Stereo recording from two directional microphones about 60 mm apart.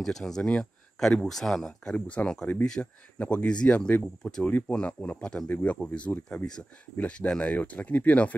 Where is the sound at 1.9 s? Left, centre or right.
Left.